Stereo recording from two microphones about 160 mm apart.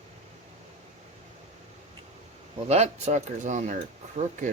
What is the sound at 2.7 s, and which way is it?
Speech, 45° right (ahead or behind).